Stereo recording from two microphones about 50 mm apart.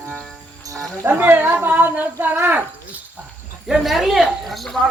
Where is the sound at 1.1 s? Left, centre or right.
Right.